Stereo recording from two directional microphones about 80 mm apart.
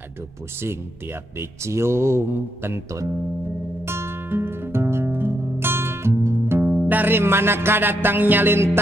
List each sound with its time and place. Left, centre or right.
1.4 s speech: right
3.8 s music: right